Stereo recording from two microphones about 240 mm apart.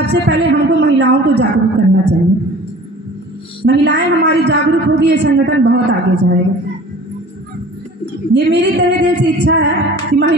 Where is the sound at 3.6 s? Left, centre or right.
Right.